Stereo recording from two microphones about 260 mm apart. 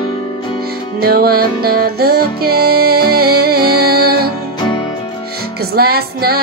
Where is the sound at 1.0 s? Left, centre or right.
Right.